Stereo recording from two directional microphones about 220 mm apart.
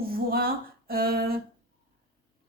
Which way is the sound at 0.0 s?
40° right (ahead or behind).